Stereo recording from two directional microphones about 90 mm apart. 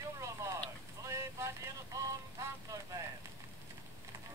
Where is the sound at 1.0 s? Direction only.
35° right (ahead or behind).